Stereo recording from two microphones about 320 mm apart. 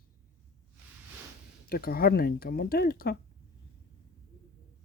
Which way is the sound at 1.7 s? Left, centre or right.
Left.